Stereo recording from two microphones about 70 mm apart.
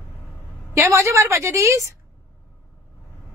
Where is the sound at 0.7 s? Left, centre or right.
Right.